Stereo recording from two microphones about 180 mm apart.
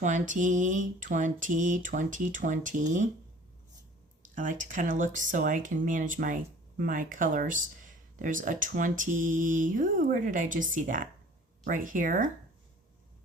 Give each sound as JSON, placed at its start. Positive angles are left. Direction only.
{"t": 0.0, "sound": "speech", "side_deg": -45}
{"t": 4.2, "sound": "speech", "side_deg": -45}